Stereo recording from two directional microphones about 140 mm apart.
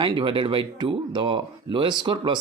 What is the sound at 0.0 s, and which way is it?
Speech, 35° right (ahead or behind).